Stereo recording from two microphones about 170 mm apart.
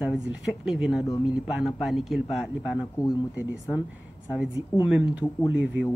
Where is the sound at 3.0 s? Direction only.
20° left (ahead or behind).